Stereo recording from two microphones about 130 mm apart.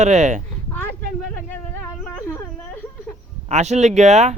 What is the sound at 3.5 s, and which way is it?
Speech, 60° right (ahead or behind).